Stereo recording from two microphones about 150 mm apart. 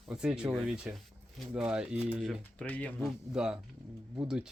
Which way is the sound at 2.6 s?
10° left (ahead or behind).